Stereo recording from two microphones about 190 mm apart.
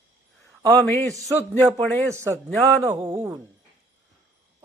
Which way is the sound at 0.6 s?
10° left (ahead or behind).